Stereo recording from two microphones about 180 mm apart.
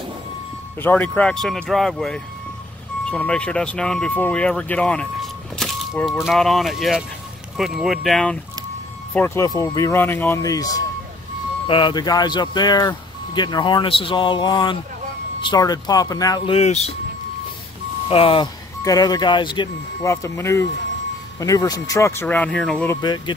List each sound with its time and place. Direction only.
0.7 s speech: 10° left (ahead or behind)
9.1 s speech: 15° left (ahead or behind); by 16.9 s 35° left (ahead or behind)
18.1 s speech: 30° left (ahead or behind); by 22.8 s 5° left (ahead or behind)
22.8 s speech: 25° left (ahead or behind)